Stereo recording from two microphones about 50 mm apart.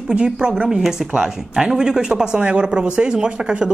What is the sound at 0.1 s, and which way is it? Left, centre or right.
A woman's voice, centre.